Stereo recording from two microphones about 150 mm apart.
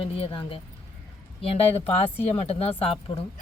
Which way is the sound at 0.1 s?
40° left (ahead or behind).